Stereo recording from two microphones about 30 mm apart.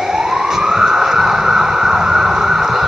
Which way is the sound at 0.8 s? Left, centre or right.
Centre.